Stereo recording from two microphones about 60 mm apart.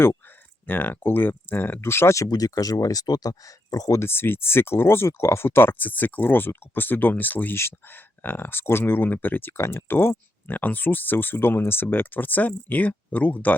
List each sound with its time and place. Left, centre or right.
0.7 s speech: left
2.1 s speech: left
3.9 s speech: left
7.5 s speech: left